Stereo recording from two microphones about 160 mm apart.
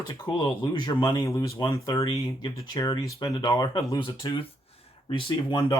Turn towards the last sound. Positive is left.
turn(degrees=30)  # may be behind; listen again after turning